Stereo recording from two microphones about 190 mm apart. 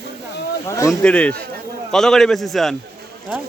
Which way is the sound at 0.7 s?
15° left (ahead or behind).